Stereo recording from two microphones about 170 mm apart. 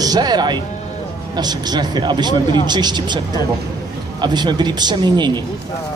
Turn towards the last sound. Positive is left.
turn(degrees=-25)  # may be behind; listen again after turning